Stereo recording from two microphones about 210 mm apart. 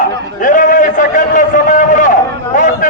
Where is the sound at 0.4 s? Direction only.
40° left (ahead or behind).